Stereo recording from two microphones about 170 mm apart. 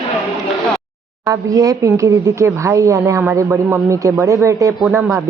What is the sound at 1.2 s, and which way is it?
A woman's voice, 20° right (ahead or behind).